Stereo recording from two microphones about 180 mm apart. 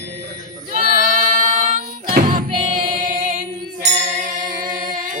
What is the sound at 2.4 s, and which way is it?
Choir, 50° right (ahead or behind).